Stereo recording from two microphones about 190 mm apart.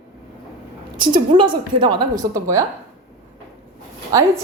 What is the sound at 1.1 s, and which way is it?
A woman's voice, 25° right (ahead or behind).